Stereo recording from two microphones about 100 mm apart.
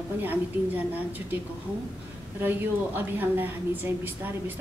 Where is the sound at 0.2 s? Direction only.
20° right (ahead or behind).